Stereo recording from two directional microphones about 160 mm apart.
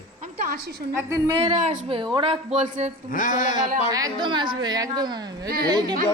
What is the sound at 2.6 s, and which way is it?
Speech, 50° right (ahead or behind).